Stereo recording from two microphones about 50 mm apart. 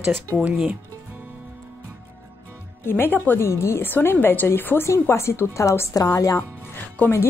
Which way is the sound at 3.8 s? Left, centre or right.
Left.